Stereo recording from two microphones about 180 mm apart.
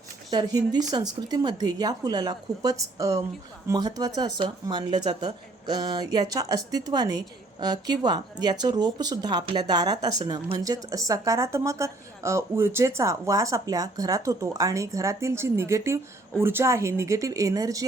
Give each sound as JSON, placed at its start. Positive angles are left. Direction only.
{"t": 0.3, "sound": "speech", "side_deg": -20}